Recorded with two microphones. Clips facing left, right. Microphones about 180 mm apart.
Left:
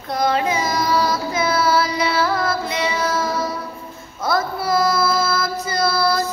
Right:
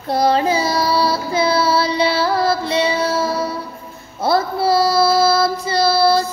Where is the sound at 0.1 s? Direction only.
35° right (ahead or behind).